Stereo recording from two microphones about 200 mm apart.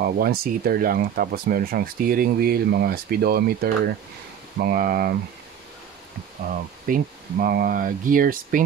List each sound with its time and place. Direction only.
0.0 s speech: 50° right (ahead or behind)
6.9 s speech: 45° right (ahead or behind)